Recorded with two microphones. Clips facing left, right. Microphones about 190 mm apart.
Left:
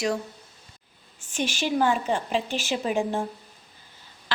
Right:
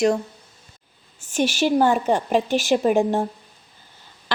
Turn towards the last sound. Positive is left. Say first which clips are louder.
# right 8 dB
turn(degrees=-55)  # may be behind; listen again after turning